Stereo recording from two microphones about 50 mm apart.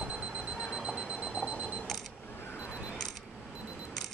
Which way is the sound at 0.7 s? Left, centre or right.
Centre.